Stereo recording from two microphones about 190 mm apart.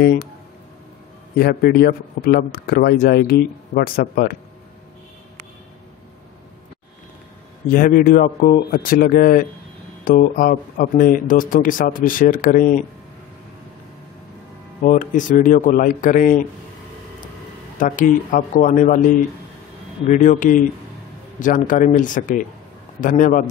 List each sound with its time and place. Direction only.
0.0 s a man's voice: 55° left (ahead or behind)
1.4 s a man's voice: 55° left (ahead or behind)
7.7 s a man's voice: 45° left (ahead or behind)
14.8 s a man's voice: 40° left (ahead or behind)
17.7 s a man's voice: 45° left (ahead or behind)
20.1 s a man's voice: 40° left (ahead or behind)